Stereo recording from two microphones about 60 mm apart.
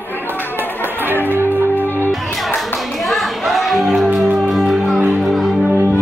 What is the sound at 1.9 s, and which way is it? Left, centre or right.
Music, left.